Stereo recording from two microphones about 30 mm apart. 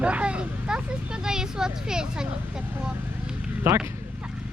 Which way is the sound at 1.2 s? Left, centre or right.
Right.